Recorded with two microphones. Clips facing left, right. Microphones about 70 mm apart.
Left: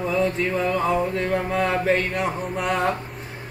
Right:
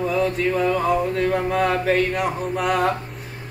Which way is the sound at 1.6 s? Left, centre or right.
Centre.